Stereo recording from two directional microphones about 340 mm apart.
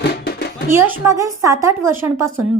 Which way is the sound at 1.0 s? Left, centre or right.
Centre.